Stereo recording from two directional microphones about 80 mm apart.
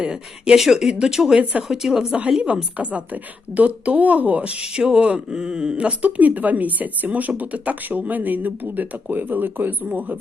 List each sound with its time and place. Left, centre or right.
0.0 s speech: centre